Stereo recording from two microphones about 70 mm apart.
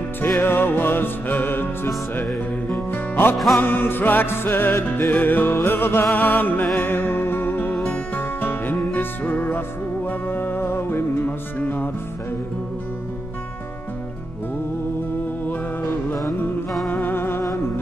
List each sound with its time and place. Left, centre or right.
0.4 s music: left
2.9 s music: left
3.3 s music: centre
3.6 s music: left
15.4 s music: left